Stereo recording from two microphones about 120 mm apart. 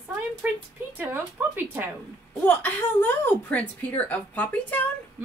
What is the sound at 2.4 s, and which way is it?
A woman's voice, 15° left (ahead or behind).